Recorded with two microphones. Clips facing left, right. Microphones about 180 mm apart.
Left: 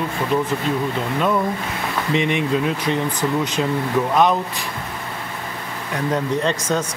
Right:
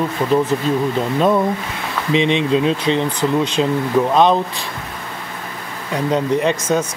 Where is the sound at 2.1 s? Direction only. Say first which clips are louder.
Right 5 dB; 20° right (ahead or behind).